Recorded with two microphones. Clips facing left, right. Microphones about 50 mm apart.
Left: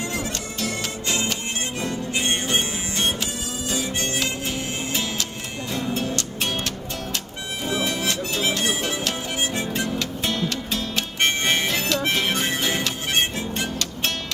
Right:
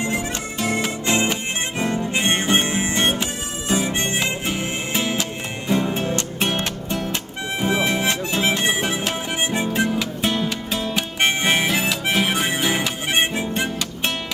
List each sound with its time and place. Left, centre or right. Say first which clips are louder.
0.6 s music: right 6 dB; right
1.8 s harmonica: right 5 dB; right
3.7 s music: right 5 dB; right